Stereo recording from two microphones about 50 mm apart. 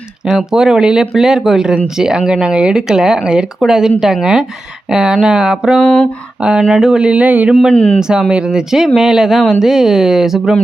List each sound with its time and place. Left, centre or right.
0.3 s speech: centre; by 7.5 s right
7.7 s speech: left
7.9 s speech: centre